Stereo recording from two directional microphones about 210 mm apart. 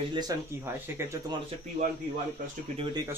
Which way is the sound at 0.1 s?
20° right (ahead or behind).